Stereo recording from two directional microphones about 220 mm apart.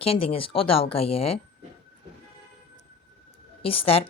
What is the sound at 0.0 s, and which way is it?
A woman's voice, 25° left (ahead or behind).